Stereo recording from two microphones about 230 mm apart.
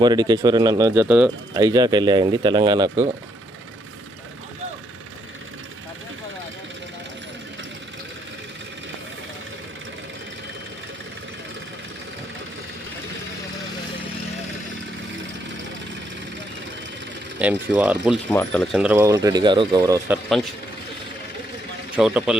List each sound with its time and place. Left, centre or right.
0.0 s speech: centre
1.6 s speech: centre
17.4 s speech: centre
18.3 s speech: centre
21.9 s speech: centre